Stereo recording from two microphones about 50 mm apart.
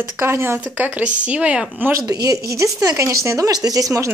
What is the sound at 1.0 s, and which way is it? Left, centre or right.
Speech, right.